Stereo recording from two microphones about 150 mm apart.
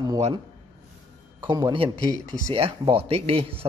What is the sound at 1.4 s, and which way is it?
Speech, 25° right (ahead or behind).